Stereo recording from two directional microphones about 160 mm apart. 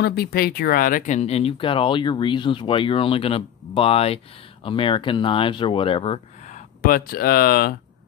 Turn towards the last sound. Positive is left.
turn(degrees=70)  # may be behind; listen again after turning